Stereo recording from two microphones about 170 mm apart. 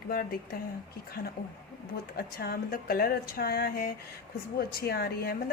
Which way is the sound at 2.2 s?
65° left (ahead or behind).